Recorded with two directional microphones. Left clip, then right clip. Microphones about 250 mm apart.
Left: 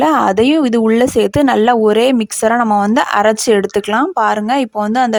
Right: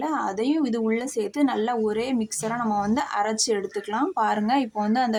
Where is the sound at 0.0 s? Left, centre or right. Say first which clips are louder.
Left 15 dB; left.